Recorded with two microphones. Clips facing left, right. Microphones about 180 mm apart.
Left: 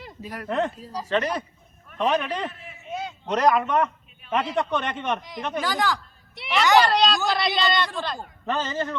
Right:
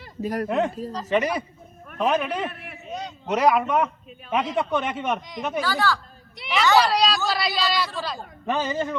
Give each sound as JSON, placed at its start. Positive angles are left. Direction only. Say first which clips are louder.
{"t": 0.2, "sound": "speech", "louder": "right 11 dB", "side_deg": -45}
{"t": 0.4, "sound": "a man's voice", "louder": "left 1 dB", "side_deg": -10}
{"t": 2.5, "sound": "a man's voice", "louder": "right 3 dB", "side_deg": -65}
{"t": 3.2, "sound": "a man's voice", "louder": "right 1 dB", "side_deg": -10}
{"t": 5.6, "sound": "a man's voice", "louder": "even", "side_deg": 15}
{"t": 6.3, "sound": "a sound", "louder": "even", "side_deg": 0}
{"t": 6.7, "sound": "a woman's voice", "louder": "left 2 dB", "side_deg": 0}